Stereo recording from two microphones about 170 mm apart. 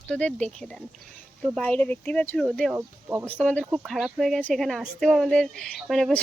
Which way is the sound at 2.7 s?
15° right (ahead or behind).